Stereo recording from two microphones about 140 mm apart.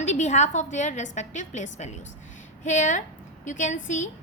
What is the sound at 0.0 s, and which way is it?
A woman's voice, 55° left (ahead or behind).